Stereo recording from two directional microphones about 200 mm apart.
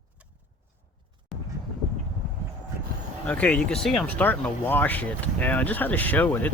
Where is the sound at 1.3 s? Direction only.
Centre (ahead or behind).